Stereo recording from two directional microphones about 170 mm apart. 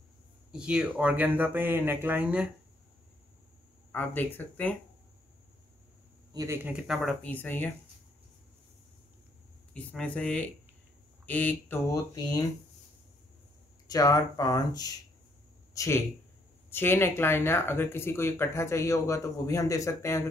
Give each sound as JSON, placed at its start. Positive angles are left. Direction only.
{"t": 0.5, "sound": "speech", "side_deg": -5}
{"t": 3.9, "sound": "speech", "side_deg": 10}
{"t": 6.3, "sound": "speech", "side_deg": -15}
{"t": 9.8, "sound": "speech", "side_deg": 5}
{"t": 13.8, "sound": "speech", "side_deg": 20}